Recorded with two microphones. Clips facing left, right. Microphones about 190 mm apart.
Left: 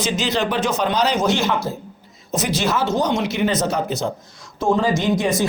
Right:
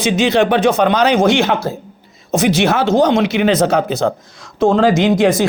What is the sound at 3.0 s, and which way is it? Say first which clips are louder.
Speech: right 7 dB; 90° right.